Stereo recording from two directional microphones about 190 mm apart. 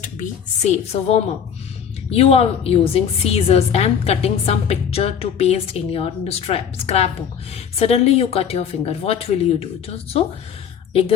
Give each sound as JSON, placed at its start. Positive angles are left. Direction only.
{"t": 0.0, "sound": "a woman's voice", "side_deg": 40}